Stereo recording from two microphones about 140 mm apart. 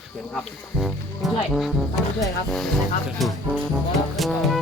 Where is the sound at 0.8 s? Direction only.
Centre (ahead or behind).